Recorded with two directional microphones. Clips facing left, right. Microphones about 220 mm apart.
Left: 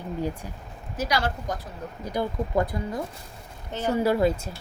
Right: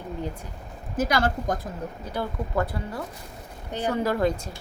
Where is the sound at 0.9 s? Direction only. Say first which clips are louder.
Right 3 dB; 50° right (ahead or behind).